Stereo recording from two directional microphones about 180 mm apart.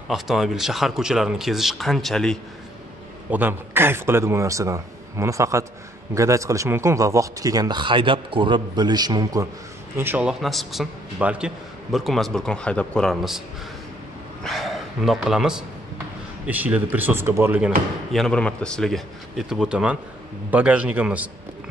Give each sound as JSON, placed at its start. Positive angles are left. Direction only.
{"t": 0.1, "sound": "speech", "side_deg": 0}
{"t": 3.3, "sound": "speech", "side_deg": -10}
{"t": 9.9, "sound": "speech", "side_deg": -10}
{"t": 14.4, "sound": "a man's voice", "side_deg": 0}